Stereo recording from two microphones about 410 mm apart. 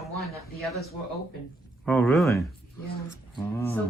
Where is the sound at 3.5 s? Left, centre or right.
Centre.